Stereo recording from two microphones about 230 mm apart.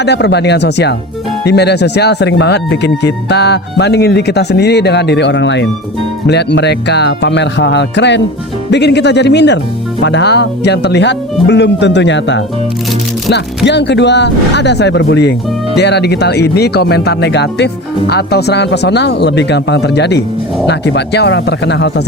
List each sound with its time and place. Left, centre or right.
0.0 s speech: left
13.7 s speech: left